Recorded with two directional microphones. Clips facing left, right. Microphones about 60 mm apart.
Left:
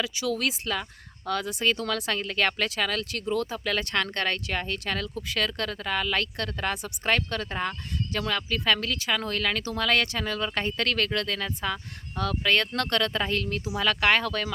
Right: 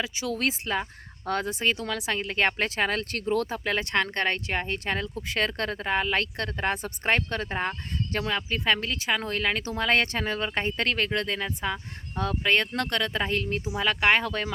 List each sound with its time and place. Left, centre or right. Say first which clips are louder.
0.0 s speech: left 1 dB; right
1.7 s speech: left 1 dB; centre